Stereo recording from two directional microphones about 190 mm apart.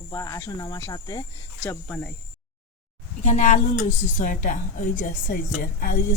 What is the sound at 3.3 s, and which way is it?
A woman's voice, 40° left (ahead or behind).